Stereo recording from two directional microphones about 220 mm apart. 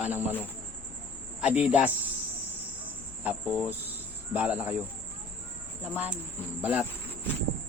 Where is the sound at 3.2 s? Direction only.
5° right (ahead or behind).